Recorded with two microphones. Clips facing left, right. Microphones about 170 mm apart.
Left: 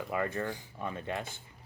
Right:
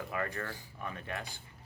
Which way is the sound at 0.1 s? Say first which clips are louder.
Left 6 dB; 20° left (ahead or behind).